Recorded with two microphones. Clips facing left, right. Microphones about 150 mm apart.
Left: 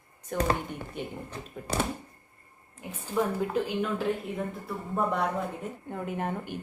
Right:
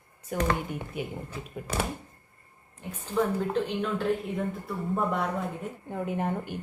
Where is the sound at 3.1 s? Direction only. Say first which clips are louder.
Right 1 dB; 5° left (ahead or behind).